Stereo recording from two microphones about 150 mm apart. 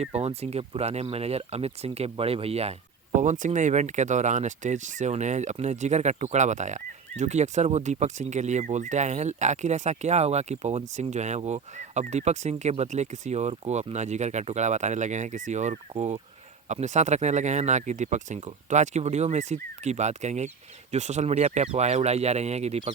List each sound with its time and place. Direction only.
0.0 s speech: 45° right (ahead or behind)
3.2 s speech: 55° right (ahead or behind)